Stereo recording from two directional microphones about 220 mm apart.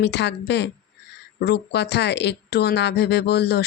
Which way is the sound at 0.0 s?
50° left (ahead or behind).